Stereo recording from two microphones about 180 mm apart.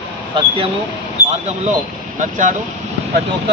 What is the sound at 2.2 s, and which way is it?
Speech, 45° right (ahead or behind).